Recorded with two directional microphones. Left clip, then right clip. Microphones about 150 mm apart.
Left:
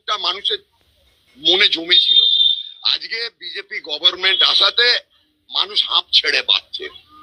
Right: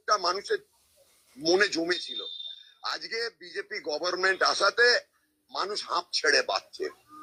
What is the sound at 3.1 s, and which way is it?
A man's voice, 25° left (ahead or behind).